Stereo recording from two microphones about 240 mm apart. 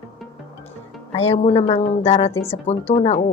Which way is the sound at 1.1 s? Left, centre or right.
Left.